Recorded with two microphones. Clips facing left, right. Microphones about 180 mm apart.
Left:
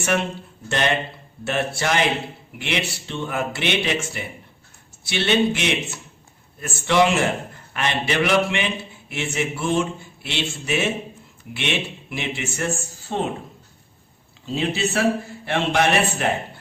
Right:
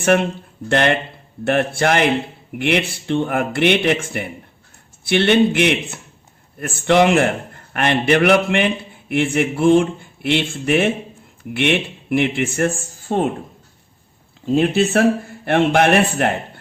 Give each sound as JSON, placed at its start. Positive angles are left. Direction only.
{"t": 0.0, "sound": "a man's voice", "side_deg": -55}
{"t": 14.4, "sound": "a man's voice", "side_deg": -55}